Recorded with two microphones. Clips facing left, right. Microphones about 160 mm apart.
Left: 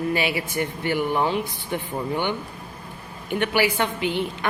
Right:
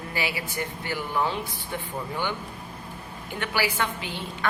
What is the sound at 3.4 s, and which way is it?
Speech, 20° left (ahead or behind).